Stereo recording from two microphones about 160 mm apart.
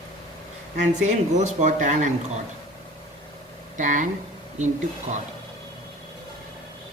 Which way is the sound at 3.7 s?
50° right (ahead or behind).